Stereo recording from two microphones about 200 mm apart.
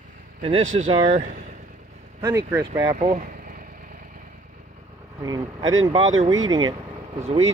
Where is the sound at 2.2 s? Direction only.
15° right (ahead or behind).